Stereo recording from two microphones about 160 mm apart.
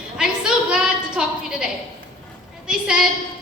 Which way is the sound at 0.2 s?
5° right (ahead or behind).